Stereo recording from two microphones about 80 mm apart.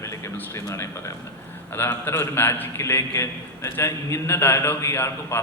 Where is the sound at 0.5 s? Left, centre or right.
Left.